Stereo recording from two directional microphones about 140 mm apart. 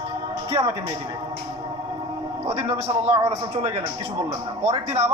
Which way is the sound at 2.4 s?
45° right (ahead or behind).